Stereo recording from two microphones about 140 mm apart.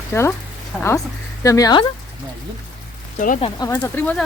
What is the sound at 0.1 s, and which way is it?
Speech, 20° left (ahead or behind).